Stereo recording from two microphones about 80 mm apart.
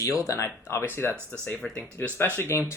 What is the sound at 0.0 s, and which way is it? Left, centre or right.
Speech, left.